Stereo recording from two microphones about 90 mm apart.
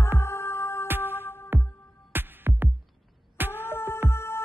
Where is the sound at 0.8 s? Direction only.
25° right (ahead or behind).